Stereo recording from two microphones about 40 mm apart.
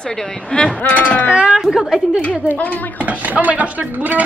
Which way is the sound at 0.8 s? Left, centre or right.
Left.